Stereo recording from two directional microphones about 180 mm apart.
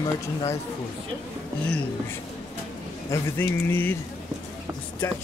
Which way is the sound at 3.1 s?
15° left (ahead or behind).